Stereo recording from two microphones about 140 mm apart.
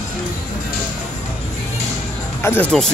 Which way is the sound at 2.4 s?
15° left (ahead or behind).